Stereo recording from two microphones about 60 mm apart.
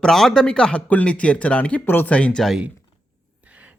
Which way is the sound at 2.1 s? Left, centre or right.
Centre.